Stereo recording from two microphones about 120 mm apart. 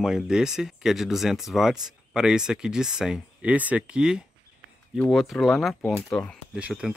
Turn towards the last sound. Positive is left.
turn(degrees=-10)  # may be behind; listen again after turning